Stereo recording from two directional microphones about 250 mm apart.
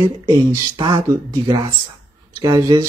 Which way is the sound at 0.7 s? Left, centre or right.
Centre.